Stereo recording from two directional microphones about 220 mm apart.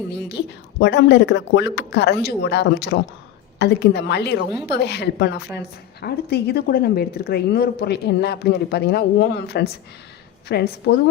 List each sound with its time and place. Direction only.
0.1 s a woman's voice: 50° left (ahead or behind)